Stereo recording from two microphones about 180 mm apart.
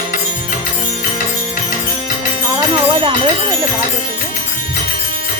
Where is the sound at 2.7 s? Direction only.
30° right (ahead or behind).